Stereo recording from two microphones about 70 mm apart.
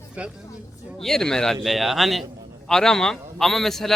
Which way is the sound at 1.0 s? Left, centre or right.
Centre.